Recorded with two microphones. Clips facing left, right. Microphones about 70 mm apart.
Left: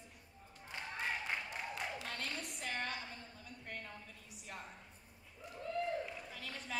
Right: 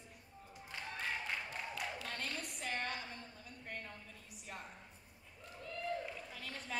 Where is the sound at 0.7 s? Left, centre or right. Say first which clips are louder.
Left 1 dB; centre.